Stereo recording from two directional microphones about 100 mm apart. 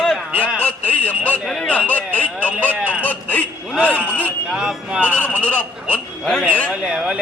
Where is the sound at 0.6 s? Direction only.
15° left (ahead or behind).